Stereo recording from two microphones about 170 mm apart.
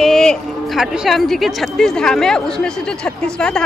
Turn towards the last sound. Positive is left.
turn(degrees=5)  # may be behind; listen again after turning